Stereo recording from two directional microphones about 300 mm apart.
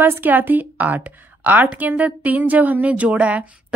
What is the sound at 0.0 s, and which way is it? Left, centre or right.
A woman's voice, centre.